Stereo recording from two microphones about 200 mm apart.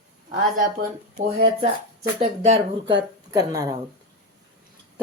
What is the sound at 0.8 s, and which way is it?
Speech, 35° right (ahead or behind).